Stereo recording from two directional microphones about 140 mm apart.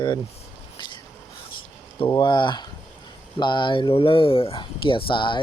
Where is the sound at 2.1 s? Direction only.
35° left (ahead or behind).